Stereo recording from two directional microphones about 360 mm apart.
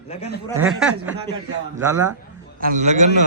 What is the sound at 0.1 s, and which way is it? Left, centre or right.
Speech, centre.